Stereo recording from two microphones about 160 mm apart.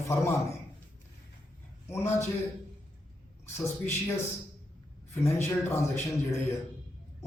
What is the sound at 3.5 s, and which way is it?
Speech, 15° left (ahead or behind).